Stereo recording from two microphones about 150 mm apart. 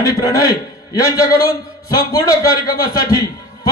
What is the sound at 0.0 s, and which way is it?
A man's voice, 20° left (ahead or behind).